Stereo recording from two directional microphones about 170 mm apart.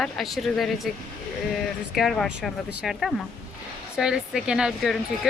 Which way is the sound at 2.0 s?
Centre (ahead or behind).